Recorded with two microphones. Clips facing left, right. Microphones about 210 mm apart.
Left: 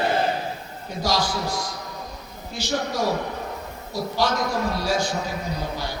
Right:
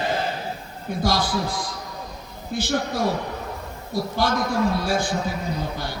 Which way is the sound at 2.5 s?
55° right (ahead or behind).